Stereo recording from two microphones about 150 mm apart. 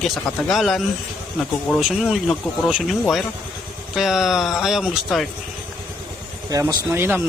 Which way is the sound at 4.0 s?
Centre (ahead or behind).